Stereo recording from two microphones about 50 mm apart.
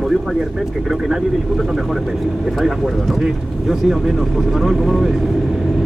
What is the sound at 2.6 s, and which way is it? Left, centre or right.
Speech, centre.